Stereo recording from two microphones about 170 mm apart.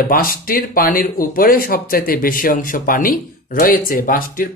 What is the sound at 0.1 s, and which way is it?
Speech, 60° left (ahead or behind).